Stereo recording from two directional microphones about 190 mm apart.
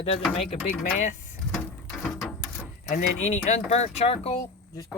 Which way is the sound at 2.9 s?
35° left (ahead or behind).